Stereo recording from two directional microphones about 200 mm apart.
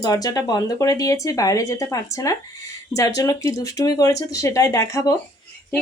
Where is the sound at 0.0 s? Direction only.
20° left (ahead or behind).